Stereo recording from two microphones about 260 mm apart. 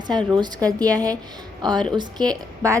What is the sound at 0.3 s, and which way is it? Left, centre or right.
A woman's voice, centre.